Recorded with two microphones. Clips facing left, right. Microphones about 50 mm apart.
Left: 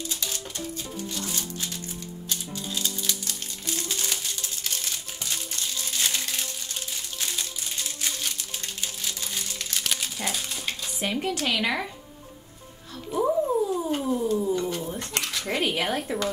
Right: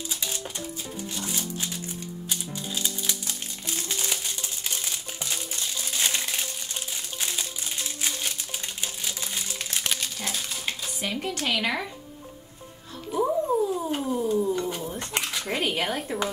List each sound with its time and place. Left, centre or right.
0.1 s typewriter: centre
1.1 s music: centre
9.9 s dog: centre
11.0 s speech: centre
11.4 s speech: centre
13.1 s cat: centre
15.0 s dishes: centre
15.4 s speech: centre